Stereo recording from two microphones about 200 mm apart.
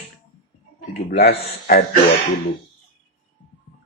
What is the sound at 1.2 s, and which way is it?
Speech, 45° left (ahead or behind).